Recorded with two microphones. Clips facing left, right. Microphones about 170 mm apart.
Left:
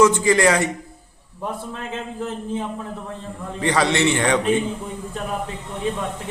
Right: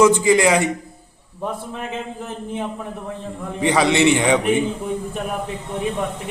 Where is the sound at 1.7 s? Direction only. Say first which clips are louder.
Right 2 dB; 15° right (ahead or behind).